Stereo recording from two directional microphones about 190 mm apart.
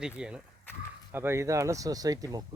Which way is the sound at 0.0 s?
5° right (ahead or behind).